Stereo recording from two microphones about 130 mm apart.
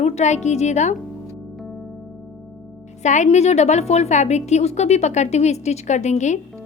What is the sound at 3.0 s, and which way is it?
A woman's voice, 65° left (ahead or behind).